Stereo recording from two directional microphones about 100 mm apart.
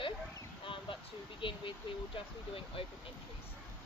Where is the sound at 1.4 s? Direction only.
60° left (ahead or behind).